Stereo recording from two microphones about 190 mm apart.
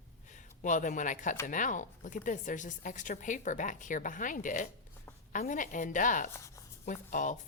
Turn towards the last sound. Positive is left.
turn(degrees=40)  # may be behind; listen again after turning